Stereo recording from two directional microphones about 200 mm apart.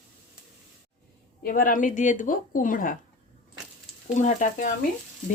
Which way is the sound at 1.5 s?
45° left (ahead or behind).